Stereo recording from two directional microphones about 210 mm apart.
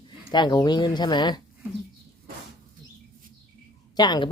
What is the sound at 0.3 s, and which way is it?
Speech, 20° left (ahead or behind).